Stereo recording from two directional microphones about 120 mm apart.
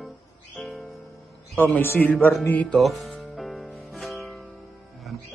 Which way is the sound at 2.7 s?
Centre (ahead or behind).